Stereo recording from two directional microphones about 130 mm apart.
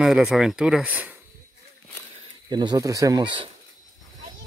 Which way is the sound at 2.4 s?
35° right (ahead or behind).